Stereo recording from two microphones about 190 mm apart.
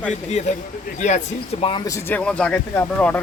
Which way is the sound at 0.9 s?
35° left (ahead or behind).